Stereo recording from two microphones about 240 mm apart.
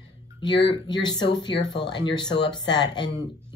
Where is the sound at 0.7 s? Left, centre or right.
Centre.